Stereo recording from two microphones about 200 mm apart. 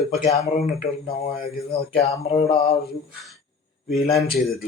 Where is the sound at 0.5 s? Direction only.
45° left (ahead or behind).